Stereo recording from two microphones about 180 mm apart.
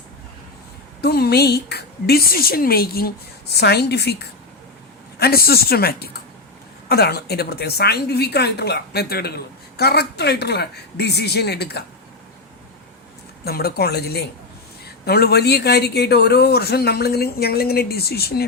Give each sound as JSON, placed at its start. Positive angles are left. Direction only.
{"t": 1.0, "sound": "a woman's voice", "side_deg": 65}
{"t": 13.4, "sound": "a woman's voice", "side_deg": 60}